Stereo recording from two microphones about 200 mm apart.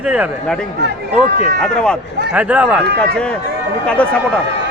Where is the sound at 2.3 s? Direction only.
5° right (ahead or behind).